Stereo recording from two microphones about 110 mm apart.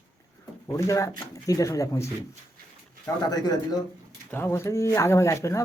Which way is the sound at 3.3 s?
35° left (ahead or behind).